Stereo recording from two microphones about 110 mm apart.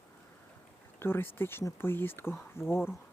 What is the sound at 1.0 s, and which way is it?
Speech, 20° left (ahead or behind).